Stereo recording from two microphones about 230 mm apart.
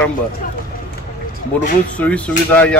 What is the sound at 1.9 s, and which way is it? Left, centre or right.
Speech, centre.